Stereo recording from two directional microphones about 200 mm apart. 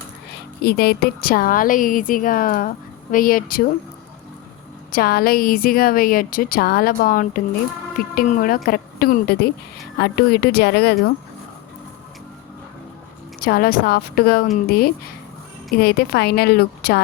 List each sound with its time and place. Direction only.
0.6 s a woman's voice: 50° left (ahead or behind)
4.9 s a woman's voice: 50° left (ahead or behind)
13.4 s a woman's voice: 45° left (ahead or behind)
15.8 s a woman's voice: 50° left (ahead or behind)